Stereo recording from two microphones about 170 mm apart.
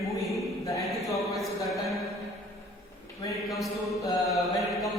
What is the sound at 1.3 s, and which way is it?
Mantra, centre (ahead or behind).